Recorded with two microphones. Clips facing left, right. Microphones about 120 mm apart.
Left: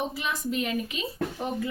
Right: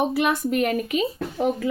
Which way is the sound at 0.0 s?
65° right (ahead or behind).